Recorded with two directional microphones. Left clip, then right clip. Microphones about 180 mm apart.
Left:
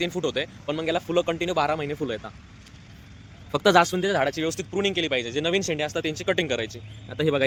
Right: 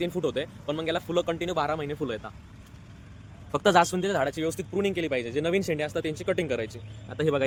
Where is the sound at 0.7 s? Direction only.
15° left (ahead or behind).